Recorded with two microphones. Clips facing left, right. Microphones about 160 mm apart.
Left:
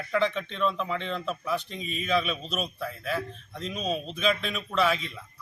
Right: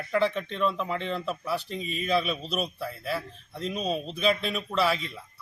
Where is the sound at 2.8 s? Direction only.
35° right (ahead or behind).